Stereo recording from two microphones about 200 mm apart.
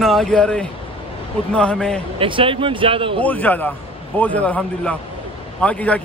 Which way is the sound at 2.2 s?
25° right (ahead or behind).